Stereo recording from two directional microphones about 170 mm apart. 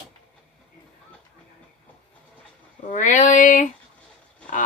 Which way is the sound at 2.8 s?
45° left (ahead or behind).